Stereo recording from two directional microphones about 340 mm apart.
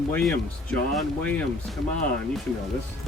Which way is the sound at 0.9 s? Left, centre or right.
Centre.